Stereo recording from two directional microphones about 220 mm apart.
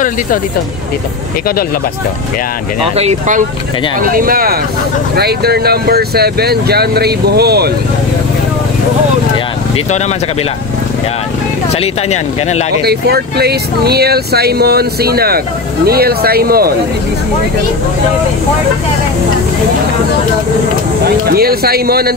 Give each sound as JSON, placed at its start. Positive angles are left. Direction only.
{"t": 3.0, "sound": "speech", "side_deg": -35}
{"t": 11.7, "sound": "speech", "side_deg": 30}
{"t": 12.8, "sound": "speech", "side_deg": -45}
{"t": 21.3, "sound": "speech", "side_deg": -45}